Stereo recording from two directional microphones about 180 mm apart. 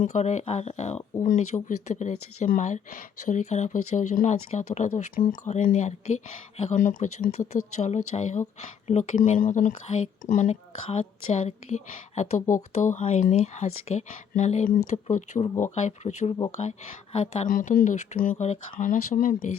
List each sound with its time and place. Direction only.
0.0 s speech: 40° left (ahead or behind)